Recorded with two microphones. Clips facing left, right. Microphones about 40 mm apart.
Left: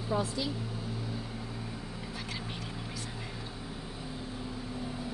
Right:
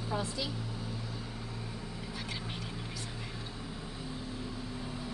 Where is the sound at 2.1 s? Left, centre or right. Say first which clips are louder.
Left 1 dB; centre.